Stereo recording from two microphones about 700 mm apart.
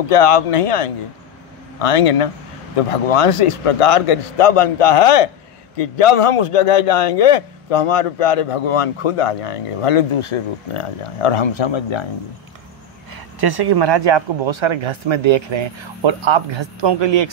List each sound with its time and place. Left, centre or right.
0.1 s a man's voice: left
13.1 s speech: right